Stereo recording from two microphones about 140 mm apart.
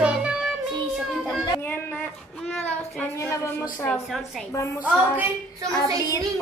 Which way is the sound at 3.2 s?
20° left (ahead or behind).